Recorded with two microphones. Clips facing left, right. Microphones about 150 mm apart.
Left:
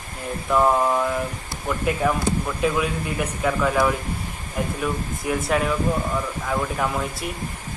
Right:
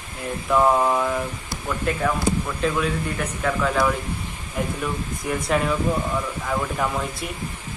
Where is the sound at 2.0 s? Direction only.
10° left (ahead or behind).